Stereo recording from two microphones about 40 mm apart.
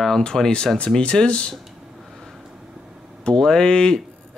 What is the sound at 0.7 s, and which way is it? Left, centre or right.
Speech, left.